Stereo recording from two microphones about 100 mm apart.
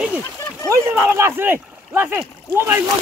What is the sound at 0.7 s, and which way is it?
Speech, 25° right (ahead or behind).